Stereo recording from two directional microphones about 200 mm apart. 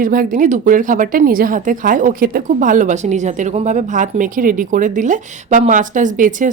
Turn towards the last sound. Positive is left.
turn(degrees=-40)  # may be behind; listen again after turning